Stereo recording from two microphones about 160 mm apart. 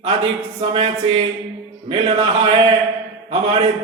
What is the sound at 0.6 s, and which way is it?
Mantra, 35° right (ahead or behind).